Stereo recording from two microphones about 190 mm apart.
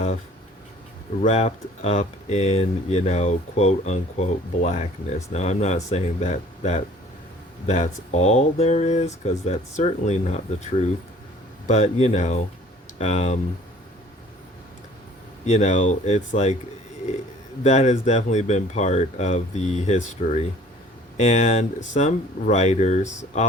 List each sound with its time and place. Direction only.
1.2 s speech: 35° left (ahead or behind)
15.4 s speech: 35° left (ahead or behind)
17.6 s speech: 40° left (ahead or behind)